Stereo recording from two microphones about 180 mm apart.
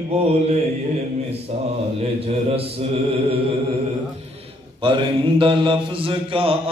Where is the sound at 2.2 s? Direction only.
35° right (ahead or behind).